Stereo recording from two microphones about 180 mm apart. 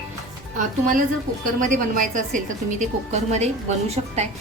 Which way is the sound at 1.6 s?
45° right (ahead or behind).